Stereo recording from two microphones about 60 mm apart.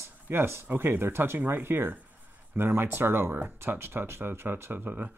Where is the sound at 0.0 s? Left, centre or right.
Right.